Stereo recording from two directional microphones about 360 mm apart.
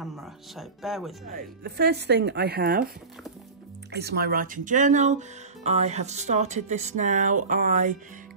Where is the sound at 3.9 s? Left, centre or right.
Right.